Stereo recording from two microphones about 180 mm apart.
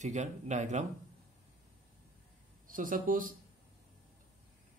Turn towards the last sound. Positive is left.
turn(degrees=-50)  # may be behind; listen again after turning